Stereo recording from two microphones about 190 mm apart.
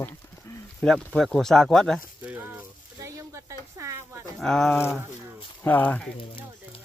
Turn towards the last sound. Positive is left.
turn(degrees=10)  # may be behind; listen again after turning